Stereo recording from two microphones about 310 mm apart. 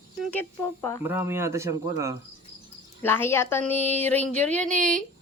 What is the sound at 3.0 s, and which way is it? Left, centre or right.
Speech, centre.